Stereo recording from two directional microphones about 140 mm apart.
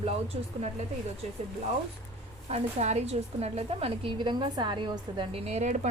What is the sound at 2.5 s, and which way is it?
A woman's voice, 55° right (ahead or behind).